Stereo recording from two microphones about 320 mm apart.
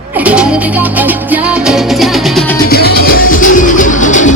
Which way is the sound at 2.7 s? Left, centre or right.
Left.